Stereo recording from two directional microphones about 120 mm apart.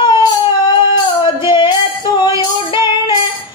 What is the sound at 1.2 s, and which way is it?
Music, 45° left (ahead or behind).